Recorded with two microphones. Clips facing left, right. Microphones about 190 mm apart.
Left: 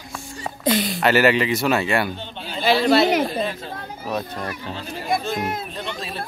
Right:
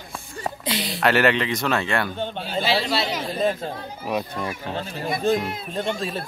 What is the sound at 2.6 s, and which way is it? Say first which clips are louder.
Speech: left 8 dB; 50° left (ahead or behind).